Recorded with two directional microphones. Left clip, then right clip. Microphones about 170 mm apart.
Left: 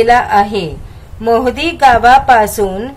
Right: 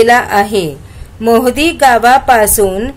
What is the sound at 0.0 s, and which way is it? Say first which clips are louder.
A woman's voice: right 1 dB; 35° right (ahead or behind).